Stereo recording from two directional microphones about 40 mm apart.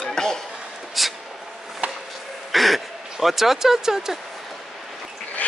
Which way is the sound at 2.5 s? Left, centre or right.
Centre.